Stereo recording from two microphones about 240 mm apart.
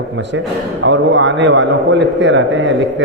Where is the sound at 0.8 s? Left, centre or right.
Right.